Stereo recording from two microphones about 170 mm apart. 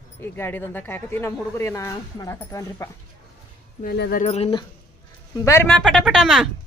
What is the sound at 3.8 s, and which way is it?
Speech, 65° left (ahead or behind).